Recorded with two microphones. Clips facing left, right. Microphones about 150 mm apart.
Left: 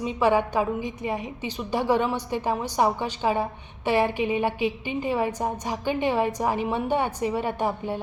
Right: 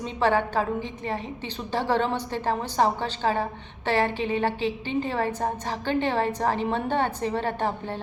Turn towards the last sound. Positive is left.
turn(degrees=10)  # may be behind; listen again after turning